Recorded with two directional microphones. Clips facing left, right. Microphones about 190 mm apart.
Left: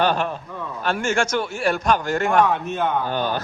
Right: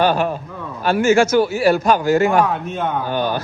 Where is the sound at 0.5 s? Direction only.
5° right (ahead or behind).